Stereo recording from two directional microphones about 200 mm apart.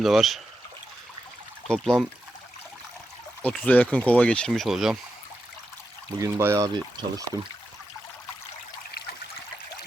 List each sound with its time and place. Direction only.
0.0 s speech: centre (ahead or behind)
1.6 s speech: 5° left (ahead or behind)
3.4 s speech: 5° left (ahead or behind)
6.1 s speech: 15° right (ahead or behind)